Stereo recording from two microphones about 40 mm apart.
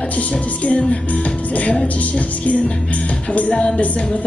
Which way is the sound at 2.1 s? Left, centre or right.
Left.